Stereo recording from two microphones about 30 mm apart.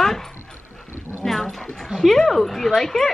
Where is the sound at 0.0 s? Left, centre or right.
Centre.